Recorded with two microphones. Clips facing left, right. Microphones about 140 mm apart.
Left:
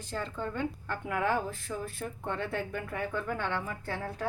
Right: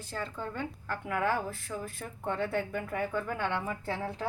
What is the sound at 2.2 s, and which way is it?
Speech, 10° right (ahead or behind).